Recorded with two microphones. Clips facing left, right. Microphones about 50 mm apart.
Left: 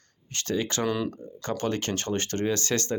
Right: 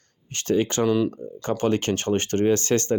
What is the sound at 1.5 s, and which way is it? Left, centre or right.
Speech, right.